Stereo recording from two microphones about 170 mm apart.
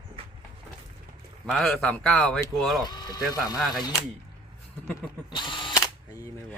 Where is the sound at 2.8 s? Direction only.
25° left (ahead or behind).